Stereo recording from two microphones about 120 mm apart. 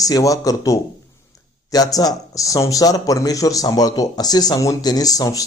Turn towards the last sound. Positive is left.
turn(degrees=30)  # may be behind; listen again after turning